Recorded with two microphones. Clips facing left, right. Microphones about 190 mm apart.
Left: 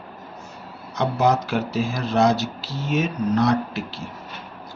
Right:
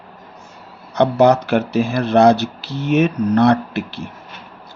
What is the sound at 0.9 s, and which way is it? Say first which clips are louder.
Speech: right 7 dB; 65° right (ahead or behind).